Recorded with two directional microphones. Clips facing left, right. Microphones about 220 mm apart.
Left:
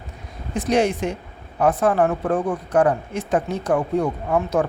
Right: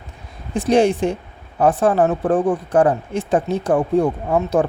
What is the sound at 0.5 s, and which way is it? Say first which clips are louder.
Speech: right 4 dB; 30° right (ahead or behind).